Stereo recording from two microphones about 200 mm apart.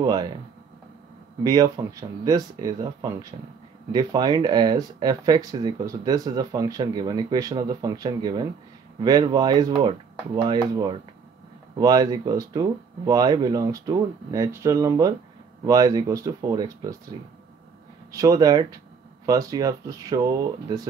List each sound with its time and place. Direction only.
0.0 s speech: 20° right (ahead or behind)
1.4 s speech: 15° right (ahead or behind)